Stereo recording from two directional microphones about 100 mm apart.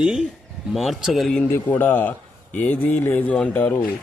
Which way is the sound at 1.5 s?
20° left (ahead or behind).